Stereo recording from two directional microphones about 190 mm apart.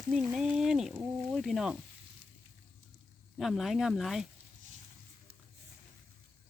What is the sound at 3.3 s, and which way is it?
Speech, centre (ahead or behind).